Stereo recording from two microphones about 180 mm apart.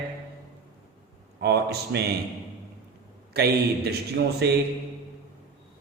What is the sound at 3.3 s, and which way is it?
A man's voice, 60° right (ahead or behind).